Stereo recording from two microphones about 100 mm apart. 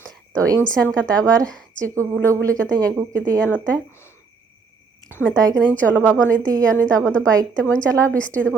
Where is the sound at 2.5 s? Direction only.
10° left (ahead or behind).